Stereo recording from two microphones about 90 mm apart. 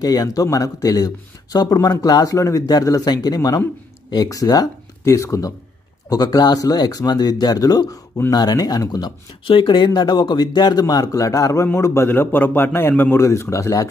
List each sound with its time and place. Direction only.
0.0 s speech: 45° left (ahead or behind)
9.4 s speech: 70° left (ahead or behind); by 11.6 s 40° left (ahead or behind)
11.6 s a man's voice: 30° left (ahead or behind)